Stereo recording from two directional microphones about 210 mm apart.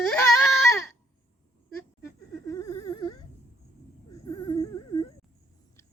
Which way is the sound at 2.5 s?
15° left (ahead or behind).